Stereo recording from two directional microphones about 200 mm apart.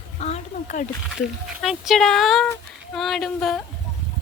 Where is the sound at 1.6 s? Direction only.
Centre (ahead or behind).